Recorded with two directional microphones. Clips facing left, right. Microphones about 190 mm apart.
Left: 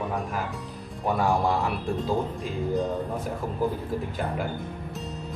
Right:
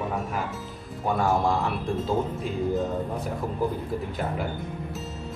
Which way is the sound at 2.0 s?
Centre (ahead or behind).